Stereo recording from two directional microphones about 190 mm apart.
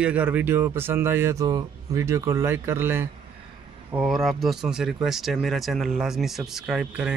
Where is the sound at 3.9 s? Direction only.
Centre (ahead or behind).